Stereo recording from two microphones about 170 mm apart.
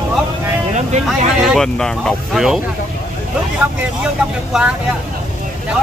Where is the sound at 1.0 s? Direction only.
Centre (ahead or behind).